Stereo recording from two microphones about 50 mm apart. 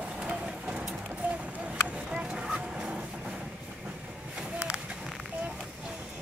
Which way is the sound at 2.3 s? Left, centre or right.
Centre.